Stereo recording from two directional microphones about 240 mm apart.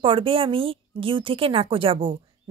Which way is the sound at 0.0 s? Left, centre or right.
Right.